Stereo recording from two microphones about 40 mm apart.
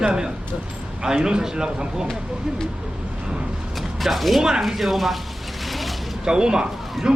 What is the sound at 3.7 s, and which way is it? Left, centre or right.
Mechanisms, centre.